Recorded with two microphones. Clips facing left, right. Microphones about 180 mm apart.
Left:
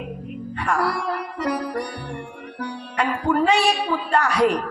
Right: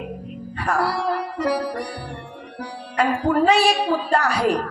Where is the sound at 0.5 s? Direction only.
30° right (ahead or behind).